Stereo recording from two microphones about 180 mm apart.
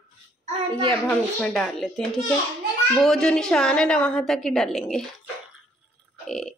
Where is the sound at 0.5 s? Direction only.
25° right (ahead or behind).